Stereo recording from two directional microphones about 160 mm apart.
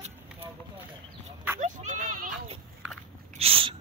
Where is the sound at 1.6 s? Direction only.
55° right (ahead or behind).